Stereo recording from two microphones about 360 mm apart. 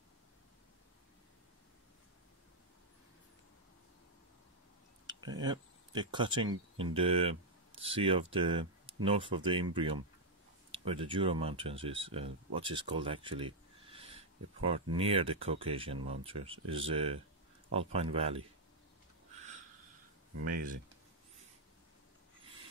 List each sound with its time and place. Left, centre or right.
5.0 s speech: centre
10.7 s speech: centre
20.4 s speech: right